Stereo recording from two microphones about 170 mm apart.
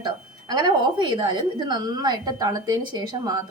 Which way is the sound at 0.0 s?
25° right (ahead or behind).